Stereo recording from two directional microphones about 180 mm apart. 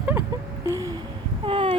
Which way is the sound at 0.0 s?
15° right (ahead or behind).